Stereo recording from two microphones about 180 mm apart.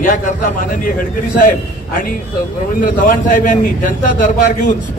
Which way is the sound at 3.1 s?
45° left (ahead or behind).